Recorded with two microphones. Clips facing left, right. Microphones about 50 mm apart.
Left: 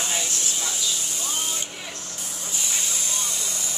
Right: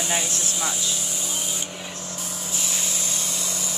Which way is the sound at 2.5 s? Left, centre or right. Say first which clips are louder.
Even; centre.